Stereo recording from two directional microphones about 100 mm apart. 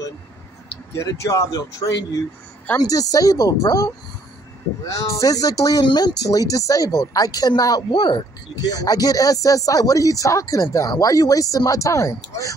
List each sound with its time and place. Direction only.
0.9 s speech: 30° left (ahead or behind)
4.9 s speech: 30° left (ahead or behind)